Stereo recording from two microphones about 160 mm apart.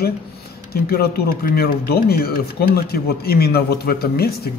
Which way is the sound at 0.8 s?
75° left (ahead or behind).